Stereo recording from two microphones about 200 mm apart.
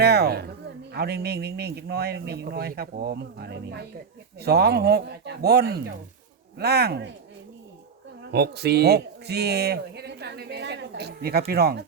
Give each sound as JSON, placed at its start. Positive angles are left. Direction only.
{"t": 0.0, "sound": "a man's voice", "side_deg": -55}
{"t": 8.3, "sound": "speech", "side_deg": -55}